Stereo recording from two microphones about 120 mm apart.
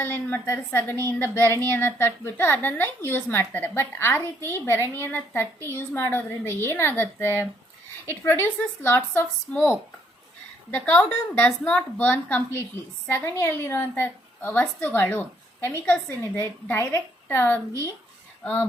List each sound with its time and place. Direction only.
0.0 s a woman's voice: 15° left (ahead or behind)
10.7 s a woman's voice: 15° left (ahead or behind)